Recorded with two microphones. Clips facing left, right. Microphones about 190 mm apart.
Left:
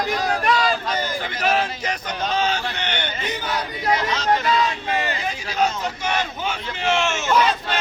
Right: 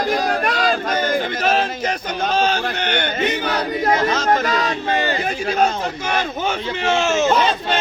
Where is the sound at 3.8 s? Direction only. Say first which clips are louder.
Right 3 dB; 45° right (ahead or behind).